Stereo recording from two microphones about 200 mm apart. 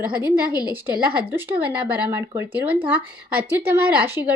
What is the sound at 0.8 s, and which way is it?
Speech, 10° right (ahead or behind).